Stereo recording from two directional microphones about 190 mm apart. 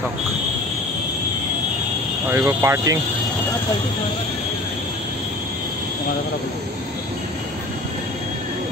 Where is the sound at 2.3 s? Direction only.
15° right (ahead or behind).